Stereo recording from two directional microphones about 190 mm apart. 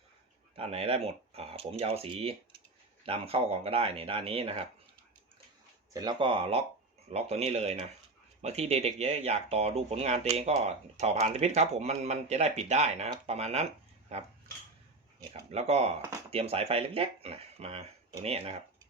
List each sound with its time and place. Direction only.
0.5 s speech: 30° right (ahead or behind)
5.9 s speech: 20° right (ahead or behind)
15.3 s speech: 35° right (ahead or behind)